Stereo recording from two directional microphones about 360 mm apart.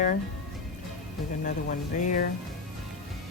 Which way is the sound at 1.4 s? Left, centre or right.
Left.